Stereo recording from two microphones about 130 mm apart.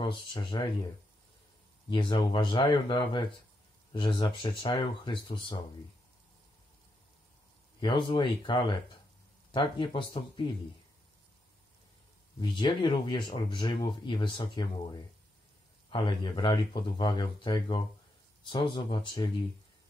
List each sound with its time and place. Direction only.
0.0 s speech: 40° left (ahead or behind)
1.9 s speech: 40° left (ahead or behind)
7.8 s speech: 40° left (ahead or behind)
12.4 s speech: 35° left (ahead or behind)